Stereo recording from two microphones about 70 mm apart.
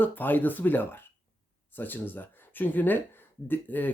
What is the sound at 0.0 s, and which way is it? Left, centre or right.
Speech, left.